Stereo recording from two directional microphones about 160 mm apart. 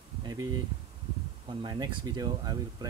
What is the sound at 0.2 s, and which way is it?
Speech, 25° right (ahead or behind).